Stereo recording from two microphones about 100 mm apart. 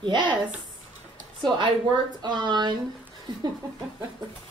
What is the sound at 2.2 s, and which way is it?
Speech, 50° right (ahead or behind).